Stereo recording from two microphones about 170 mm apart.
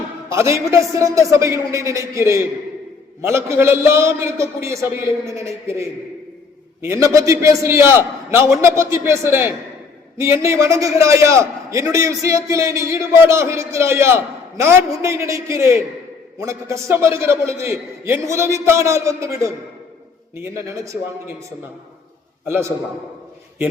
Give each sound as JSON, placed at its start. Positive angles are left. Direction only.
{"t": 0.3, "sound": "a man's voice", "side_deg": -15}
{"t": 6.8, "sound": "a man's voice", "side_deg": -20}
{"t": 22.4, "sound": "a man's voice", "side_deg": -15}